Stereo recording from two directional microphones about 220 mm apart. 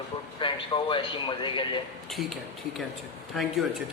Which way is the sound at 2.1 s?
Centre (ahead or behind).